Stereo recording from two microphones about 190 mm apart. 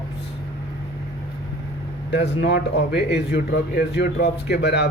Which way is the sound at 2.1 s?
65° left (ahead or behind).